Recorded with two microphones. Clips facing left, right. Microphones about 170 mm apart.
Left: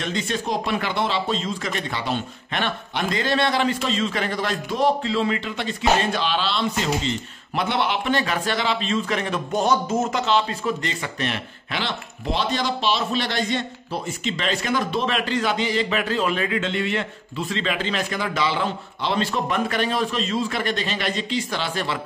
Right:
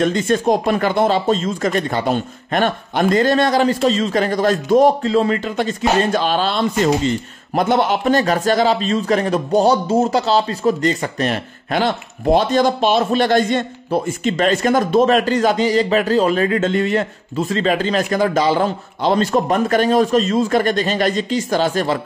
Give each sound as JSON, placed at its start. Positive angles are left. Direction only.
{"t": 0.0, "sound": "speech", "side_deg": -45}